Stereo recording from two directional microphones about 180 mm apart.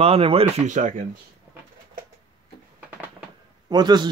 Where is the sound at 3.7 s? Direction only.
25° right (ahead or behind).